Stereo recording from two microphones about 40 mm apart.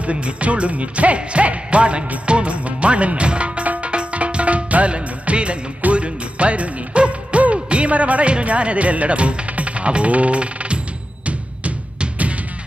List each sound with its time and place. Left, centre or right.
0.0 s music: right
3.9 s music of bollywood: right
5.8 s music: right